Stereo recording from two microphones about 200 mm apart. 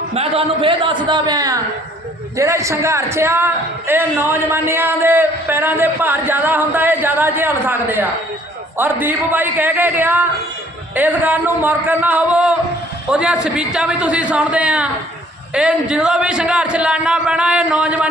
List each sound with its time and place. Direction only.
0.1 s a man's voice: 30° right (ahead or behind); by 18.1 s 5° right (ahead or behind)